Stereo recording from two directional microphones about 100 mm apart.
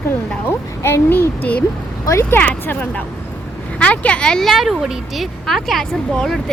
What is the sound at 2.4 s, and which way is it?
Child singing, 15° left (ahead or behind).